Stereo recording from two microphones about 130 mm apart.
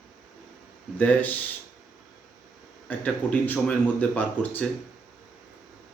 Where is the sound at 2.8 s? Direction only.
10° left (ahead or behind).